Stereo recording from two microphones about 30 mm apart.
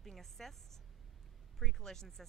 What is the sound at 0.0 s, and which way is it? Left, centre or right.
A woman's voice, centre.